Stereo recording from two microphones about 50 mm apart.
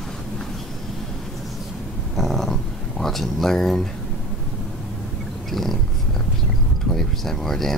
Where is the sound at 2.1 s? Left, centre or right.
Centre.